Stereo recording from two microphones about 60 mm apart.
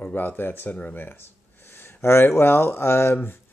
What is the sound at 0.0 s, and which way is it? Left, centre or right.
Speech, left.